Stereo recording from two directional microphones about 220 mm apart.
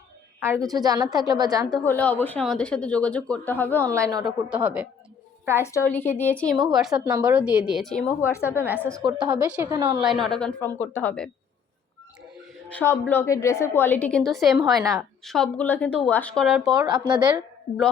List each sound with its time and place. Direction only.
0.3 s a woman's voice: 10° right (ahead or behind)
1.9 s speech: 10° left (ahead or behind)
3.9 s a woman's voice: 15° right (ahead or behind)
5.6 s a woman's voice: 10° left (ahead or behind)
8.5 s a woman's voice: 10° right (ahead or behind)
9.0 s speech: 20° right (ahead or behind)
9.3 s a woman's voice: 10° right (ahead or behind)
10.0 s a woman's voice: centre (ahead or behind)
12.6 s a woman's voice: 10° left (ahead or behind)
16.8 s speech: 20° right (ahead or behind)